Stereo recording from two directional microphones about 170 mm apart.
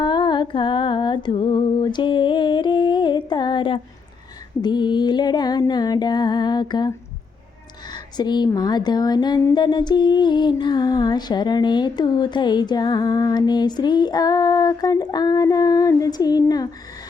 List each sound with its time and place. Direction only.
0.0 s music: 25° left (ahead or behind)
4.6 s speech: 25° left (ahead or behind)
7.9 s speech: 25° left (ahead or behind)